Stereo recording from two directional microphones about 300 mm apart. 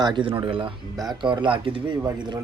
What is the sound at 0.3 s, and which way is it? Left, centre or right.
Speech, centre.